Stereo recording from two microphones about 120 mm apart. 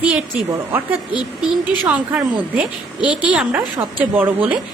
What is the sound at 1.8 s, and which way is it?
A woman's voice, 10° right (ahead or behind).